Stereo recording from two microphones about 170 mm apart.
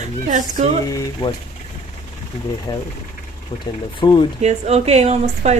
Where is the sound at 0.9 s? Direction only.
20° left (ahead or behind).